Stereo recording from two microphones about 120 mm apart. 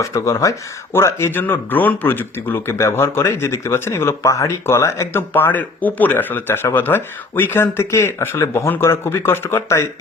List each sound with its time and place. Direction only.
0.0 s speech: 25° left (ahead or behind)